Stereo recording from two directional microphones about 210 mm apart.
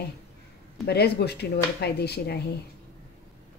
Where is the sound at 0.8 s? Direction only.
50° left (ahead or behind).